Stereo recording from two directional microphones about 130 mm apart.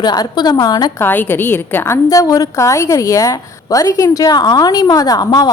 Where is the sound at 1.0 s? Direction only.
15° left (ahead or behind).